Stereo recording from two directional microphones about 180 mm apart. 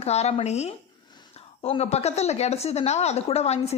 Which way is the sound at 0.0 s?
35° left (ahead or behind).